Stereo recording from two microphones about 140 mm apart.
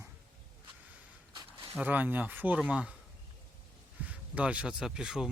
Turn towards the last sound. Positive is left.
turn(degrees=-5)  # may be behind; listen again after turning